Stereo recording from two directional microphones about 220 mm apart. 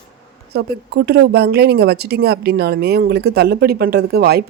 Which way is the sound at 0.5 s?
50° right (ahead or behind).